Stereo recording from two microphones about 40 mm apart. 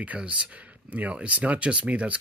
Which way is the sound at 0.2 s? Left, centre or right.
Right.